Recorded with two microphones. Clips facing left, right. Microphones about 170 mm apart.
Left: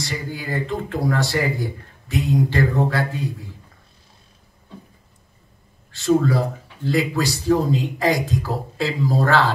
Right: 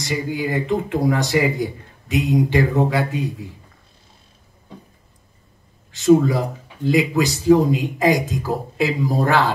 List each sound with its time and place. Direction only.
0.0 s a man's voice: 20° right (ahead or behind)
5.9 s a man's voice: 20° right (ahead or behind)